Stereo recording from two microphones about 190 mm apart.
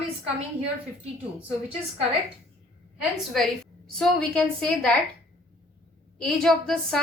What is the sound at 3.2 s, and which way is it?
A woman's voice, centre (ahead or behind).